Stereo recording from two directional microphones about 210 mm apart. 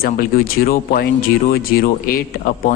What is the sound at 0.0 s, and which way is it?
A man's voice, 45° left (ahead or behind).